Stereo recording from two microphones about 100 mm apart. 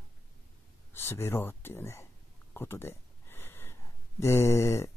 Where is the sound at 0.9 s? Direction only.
25° left (ahead or behind).